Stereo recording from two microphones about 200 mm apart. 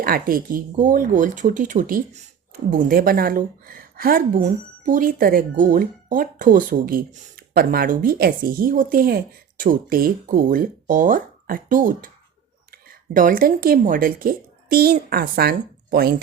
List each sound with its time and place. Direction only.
0.0 s a woman's voice: 45° right (ahead or behind)